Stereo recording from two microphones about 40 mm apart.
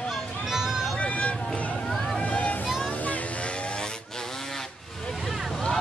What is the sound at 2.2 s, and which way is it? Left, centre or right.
Boat, left.